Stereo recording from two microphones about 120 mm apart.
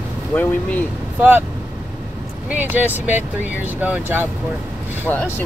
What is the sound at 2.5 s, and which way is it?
Speech, 15° right (ahead or behind).